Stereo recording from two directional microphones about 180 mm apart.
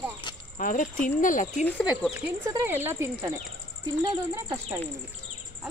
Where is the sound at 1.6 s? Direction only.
10° left (ahead or behind).